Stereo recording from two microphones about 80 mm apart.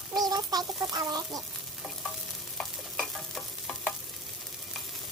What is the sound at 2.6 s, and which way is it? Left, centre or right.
Stir, centre.